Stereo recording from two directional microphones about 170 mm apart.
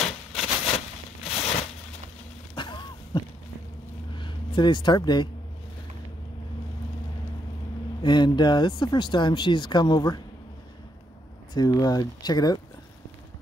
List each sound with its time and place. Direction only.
0.7 s a sound: 35° left (ahead or behind)
8.0 s speech: 25° left (ahead or behind)
11.5 s speech: 25° left (ahead or behind)